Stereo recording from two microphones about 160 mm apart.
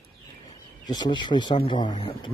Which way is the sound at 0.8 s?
25° left (ahead or behind).